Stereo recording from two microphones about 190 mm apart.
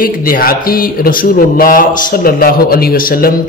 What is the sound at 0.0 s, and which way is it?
Speech, 50° left (ahead or behind).